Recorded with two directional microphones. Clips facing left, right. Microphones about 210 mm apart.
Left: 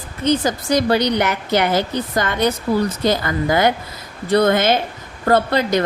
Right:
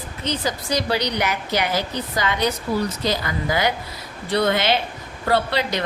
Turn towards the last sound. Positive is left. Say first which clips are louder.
# left 5 dB
turn(degrees=45)  # may be behind; listen again after turning